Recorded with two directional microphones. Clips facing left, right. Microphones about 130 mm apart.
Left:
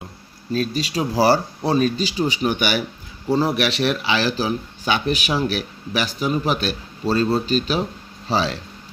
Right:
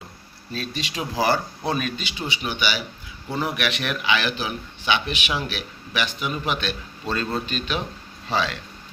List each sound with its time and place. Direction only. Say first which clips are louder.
0.5 s speech: left 8 dB; 40° left (ahead or behind)
3.2 s speech: left 7 dB; 35° left (ahead or behind)